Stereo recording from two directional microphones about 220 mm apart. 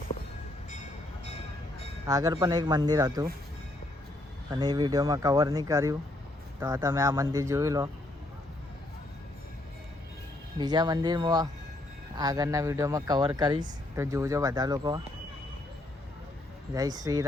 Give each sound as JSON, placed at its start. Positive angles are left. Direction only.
{"t": 2.0, "sound": "speech", "side_deg": -15}
{"t": 4.5, "sound": "speech", "side_deg": -15}
{"t": 10.6, "sound": "speech", "side_deg": -20}
{"t": 16.7, "sound": "speech", "side_deg": -15}